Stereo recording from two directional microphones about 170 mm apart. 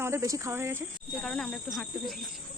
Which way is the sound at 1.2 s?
5° left (ahead or behind).